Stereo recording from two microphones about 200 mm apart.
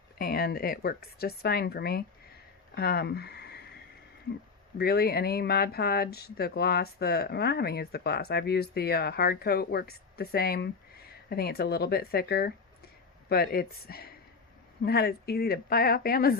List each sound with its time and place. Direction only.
0.2 s speech: 50° left (ahead or behind)
2.7 s a sound: 50° left (ahead or behind)
4.8 s speech: 50° left (ahead or behind)